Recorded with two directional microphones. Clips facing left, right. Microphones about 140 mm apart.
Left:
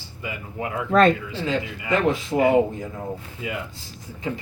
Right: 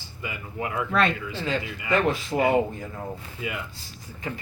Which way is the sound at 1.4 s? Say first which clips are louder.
Left 3 dB; 20° left (ahead or behind).